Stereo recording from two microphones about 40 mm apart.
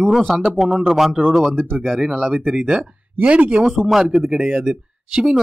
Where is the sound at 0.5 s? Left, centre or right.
Centre.